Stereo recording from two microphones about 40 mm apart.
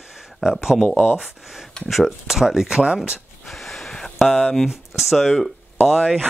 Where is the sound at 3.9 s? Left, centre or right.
Centre.